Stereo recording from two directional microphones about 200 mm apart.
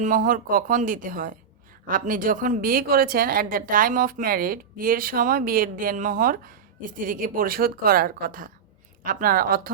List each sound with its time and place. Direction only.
0.0 s a woman's voice: 40° right (ahead or behind)